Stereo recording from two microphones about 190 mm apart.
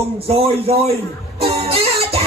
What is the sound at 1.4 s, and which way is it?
Music, 30° right (ahead or behind).